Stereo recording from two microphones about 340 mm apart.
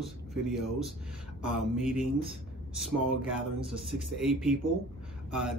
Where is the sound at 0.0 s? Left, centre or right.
Centre.